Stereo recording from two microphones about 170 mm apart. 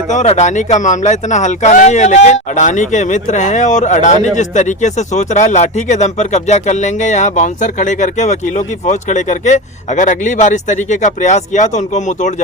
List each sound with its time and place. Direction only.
0.1 s speech: 45° left (ahead or behind)